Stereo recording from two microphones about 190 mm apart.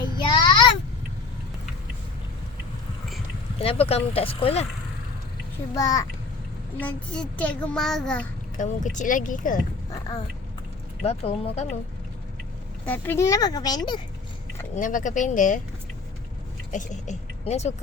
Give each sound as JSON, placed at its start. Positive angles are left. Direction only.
{"t": 0.2, "sound": "child singing", "side_deg": 25}
{"t": 3.6, "sound": "speech", "side_deg": 30}
{"t": 5.7, "sound": "speech", "side_deg": 20}
{"t": 6.7, "sound": "a child's voice", "side_deg": 5}
{"t": 8.5, "sound": "speech", "side_deg": 40}
{"t": 11.0, "sound": "speech", "side_deg": 35}
{"t": 12.8, "sound": "speech", "side_deg": 10}
{"t": 14.8, "sound": "speech", "side_deg": 45}
{"t": 16.7, "sound": "speech", "side_deg": 40}